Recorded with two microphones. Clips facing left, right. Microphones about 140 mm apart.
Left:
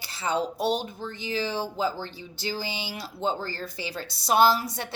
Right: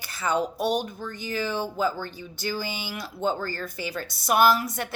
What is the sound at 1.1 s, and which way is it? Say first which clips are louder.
Speech: even; 45° right (ahead or behind).